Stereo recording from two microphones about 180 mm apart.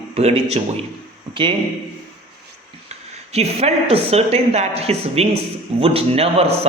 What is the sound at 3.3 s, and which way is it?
A man's voice, 35° right (ahead or behind).